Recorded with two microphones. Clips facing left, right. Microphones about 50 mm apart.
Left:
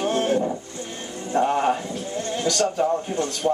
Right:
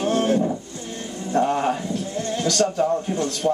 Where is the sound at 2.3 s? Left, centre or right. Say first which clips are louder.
Right 1 dB; centre.